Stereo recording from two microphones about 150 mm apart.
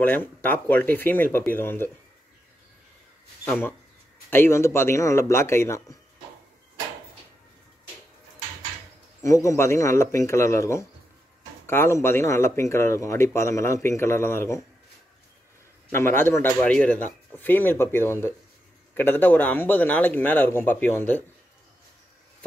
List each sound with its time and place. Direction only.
0.0 s speech: 10° left (ahead or behind)
4.3 s speech: 15° left (ahead or behind)
9.2 s speech: 20° left (ahead or behind)
15.9 s speech: 15° left (ahead or behind)